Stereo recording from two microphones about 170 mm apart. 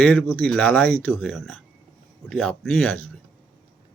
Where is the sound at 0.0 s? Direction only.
5° left (ahead or behind).